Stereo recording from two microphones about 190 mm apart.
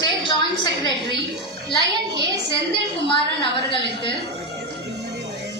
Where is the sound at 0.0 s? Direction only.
25° left (ahead or behind).